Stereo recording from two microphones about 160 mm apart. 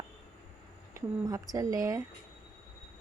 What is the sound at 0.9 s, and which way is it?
Speech, 20° right (ahead or behind).